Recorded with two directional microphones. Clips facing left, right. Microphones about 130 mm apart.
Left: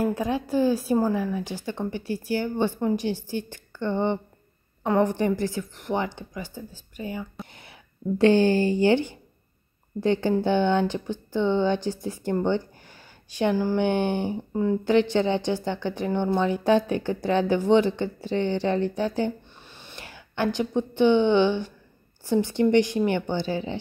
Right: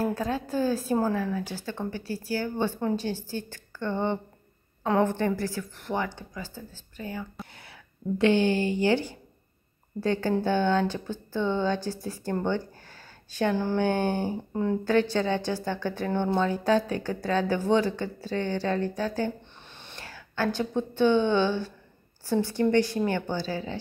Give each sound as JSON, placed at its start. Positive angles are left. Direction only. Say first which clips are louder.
{"t": 0.0, "sound": "a woman's voice", "louder": "left 3 dB", "side_deg": 15}
{"t": 8.2, "sound": "a woman's voice", "louder": "left 4 dB", "side_deg": 35}
{"t": 14.5, "sound": "speech", "louder": "left 4 dB", "side_deg": 5}
{"t": 14.9, "sound": "a woman's voice", "louder": "left 3 dB", "side_deg": 20}